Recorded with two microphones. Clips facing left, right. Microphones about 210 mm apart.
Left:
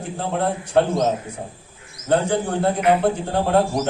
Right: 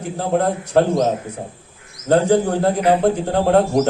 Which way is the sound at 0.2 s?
40° right (ahead or behind).